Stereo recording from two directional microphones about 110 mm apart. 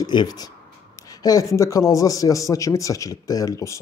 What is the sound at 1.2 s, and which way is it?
Speech, 30° left (ahead or behind).